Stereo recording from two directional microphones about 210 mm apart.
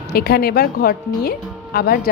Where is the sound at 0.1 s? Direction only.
50° left (ahead or behind).